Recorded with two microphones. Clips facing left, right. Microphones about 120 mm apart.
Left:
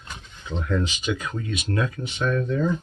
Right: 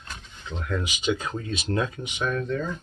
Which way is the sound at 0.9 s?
25° right (ahead or behind).